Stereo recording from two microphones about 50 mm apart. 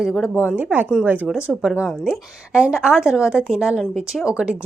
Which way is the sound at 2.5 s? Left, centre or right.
Centre.